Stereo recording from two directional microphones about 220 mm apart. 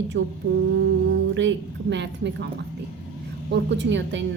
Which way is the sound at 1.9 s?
50° right (ahead or behind).